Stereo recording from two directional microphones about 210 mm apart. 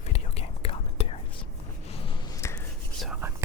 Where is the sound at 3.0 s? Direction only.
5° right (ahead or behind).